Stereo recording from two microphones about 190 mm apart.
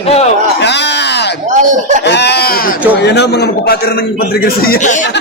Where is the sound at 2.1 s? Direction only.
60° left (ahead or behind).